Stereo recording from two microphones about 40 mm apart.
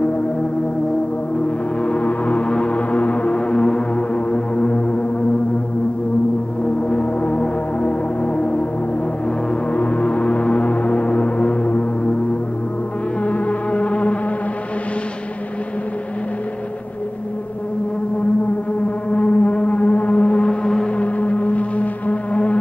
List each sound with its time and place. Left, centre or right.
1.8 s music: left
6.9 s music: left
9.7 s music: left
13.2 s insect: left
19.0 s music: left
21.0 s music: left